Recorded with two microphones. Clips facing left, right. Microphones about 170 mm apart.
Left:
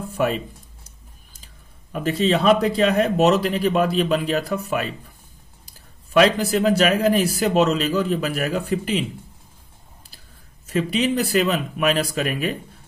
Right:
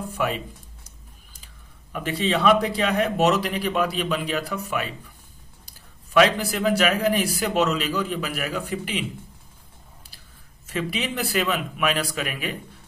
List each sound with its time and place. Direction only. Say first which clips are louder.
2.0 s speech: left 4 dB; 40° left (ahead or behind)
6.1 s a man's voice: left 3 dB; 40° left (ahead or behind)
10.7 s speech: left 7 dB; 40° left (ahead or behind)